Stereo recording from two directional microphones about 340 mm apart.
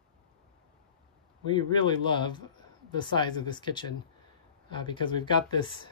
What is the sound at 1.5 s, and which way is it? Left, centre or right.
Speech, centre.